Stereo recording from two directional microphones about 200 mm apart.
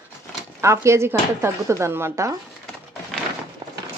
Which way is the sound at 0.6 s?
15° right (ahead or behind).